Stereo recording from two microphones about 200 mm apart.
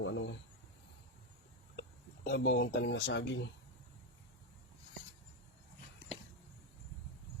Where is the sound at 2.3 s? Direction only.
55° left (ahead or behind).